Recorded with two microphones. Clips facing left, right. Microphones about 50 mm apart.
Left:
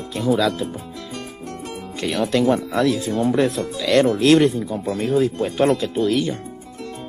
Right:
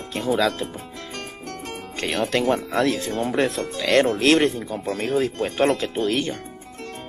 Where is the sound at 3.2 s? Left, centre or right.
Right.